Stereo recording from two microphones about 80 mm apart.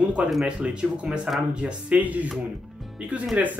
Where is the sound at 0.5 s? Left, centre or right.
Centre.